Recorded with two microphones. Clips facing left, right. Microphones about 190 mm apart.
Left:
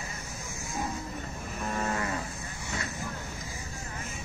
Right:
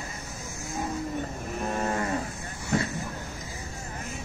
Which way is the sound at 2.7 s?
50° right (ahead or behind).